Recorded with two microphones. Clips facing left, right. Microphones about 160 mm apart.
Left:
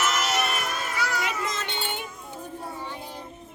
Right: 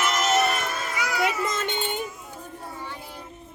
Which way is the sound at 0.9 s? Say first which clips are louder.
Right 5 dB; 10° right (ahead or behind).